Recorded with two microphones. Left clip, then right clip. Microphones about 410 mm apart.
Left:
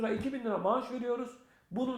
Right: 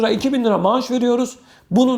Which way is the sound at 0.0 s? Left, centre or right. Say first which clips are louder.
Right 16 dB; right.